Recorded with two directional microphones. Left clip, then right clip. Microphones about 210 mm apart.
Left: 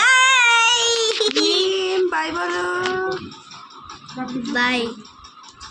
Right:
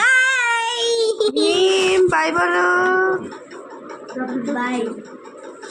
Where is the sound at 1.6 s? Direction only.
20° left (ahead or behind).